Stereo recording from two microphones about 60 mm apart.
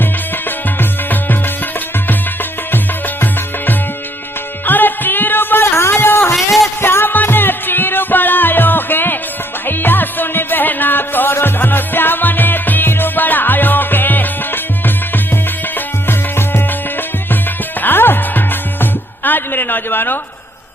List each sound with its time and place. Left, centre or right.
0.0 s music: left
4.6 s music: left
6.3 s a sound: centre
6.8 s music: left
17.7 s music: left